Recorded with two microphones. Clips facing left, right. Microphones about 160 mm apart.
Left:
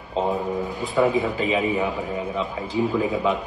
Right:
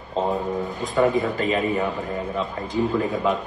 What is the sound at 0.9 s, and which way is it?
Speech, centre (ahead or behind).